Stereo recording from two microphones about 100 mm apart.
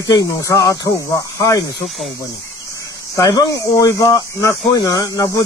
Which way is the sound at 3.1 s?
35° left (ahead or behind).